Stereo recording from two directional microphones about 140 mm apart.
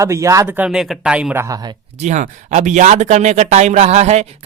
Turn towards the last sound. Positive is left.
turn(degrees=-50)  # may be behind; listen again after turning